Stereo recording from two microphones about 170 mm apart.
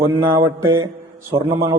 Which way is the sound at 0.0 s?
15° right (ahead or behind).